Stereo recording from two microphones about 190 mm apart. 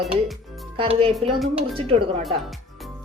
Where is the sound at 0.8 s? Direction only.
30° right (ahead or behind).